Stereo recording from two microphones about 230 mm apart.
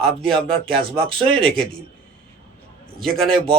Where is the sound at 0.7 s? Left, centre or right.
Right.